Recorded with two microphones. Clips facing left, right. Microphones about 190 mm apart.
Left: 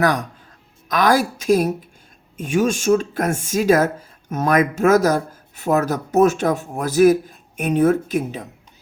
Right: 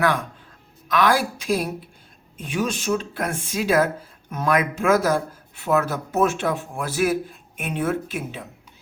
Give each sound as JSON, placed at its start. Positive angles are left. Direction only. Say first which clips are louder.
{"t": 0.0, "sound": "speech", "louder": "left 3 dB", "side_deg": 40}